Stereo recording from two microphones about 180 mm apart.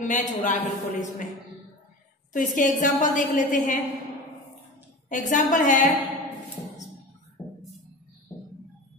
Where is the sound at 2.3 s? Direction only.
45° left (ahead or behind).